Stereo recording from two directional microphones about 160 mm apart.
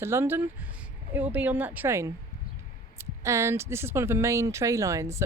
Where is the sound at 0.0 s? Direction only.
15° right (ahead or behind).